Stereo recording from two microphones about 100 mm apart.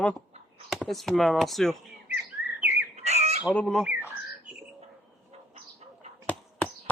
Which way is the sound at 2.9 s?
90° right.